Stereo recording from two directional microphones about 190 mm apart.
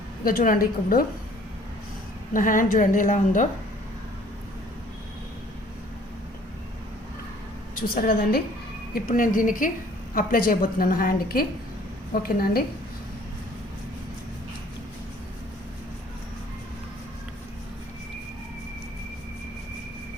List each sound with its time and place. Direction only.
0.3 s a woman's voice: 50° left (ahead or behind)
2.3 s a woman's voice: 45° left (ahead or behind)
7.8 s a woman's voice: 50° left (ahead or behind)